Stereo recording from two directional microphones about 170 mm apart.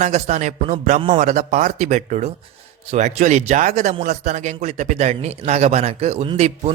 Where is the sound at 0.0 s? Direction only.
40° right (ahead or behind).